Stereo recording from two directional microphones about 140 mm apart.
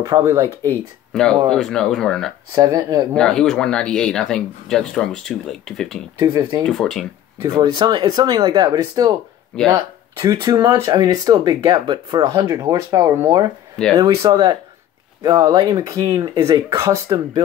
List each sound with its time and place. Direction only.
0.0 s speech: 25° right (ahead or behind)
1.1 s speech: 5° left (ahead or behind)
2.5 s speech: 30° right (ahead or behind)
3.2 s speech: 5° left (ahead or behind)
6.1 s speech: 30° right (ahead or behind)
6.6 s speech: centre (ahead or behind)
7.4 s speech: 30° right (ahead or behind)